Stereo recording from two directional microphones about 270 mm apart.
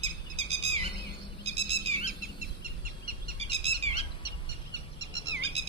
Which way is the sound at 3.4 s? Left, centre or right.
Right.